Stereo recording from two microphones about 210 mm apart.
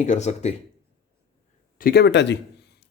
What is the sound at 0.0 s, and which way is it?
Speech, 35° left (ahead or behind).